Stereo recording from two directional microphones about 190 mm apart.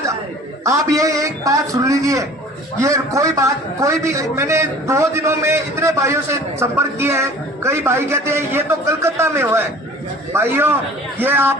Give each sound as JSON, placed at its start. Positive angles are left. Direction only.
{"t": 0.6, "sound": "a man's voice", "side_deg": -15}